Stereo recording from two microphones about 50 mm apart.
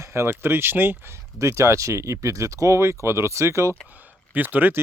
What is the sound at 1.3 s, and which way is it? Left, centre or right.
Speech, right.